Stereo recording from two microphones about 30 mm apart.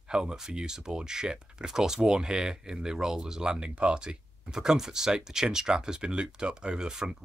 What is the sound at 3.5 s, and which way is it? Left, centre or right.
Speech, right.